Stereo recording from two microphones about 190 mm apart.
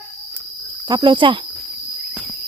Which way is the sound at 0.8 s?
25° right (ahead or behind).